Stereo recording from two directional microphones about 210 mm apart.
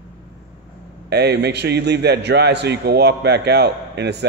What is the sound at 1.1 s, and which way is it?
A man's voice, 50° right (ahead or behind).